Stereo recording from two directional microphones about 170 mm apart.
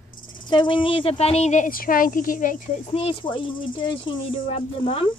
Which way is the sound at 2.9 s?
35° left (ahead or behind).